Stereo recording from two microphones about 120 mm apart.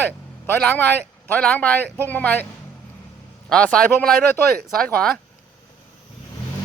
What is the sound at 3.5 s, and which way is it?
Speech, 10° left (ahead or behind).